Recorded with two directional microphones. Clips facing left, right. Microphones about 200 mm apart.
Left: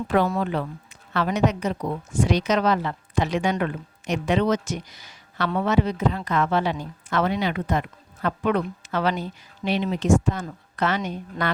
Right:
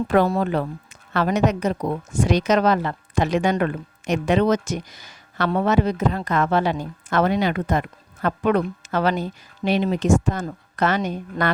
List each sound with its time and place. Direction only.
0.3 s a woman's voice: 40° right (ahead or behind)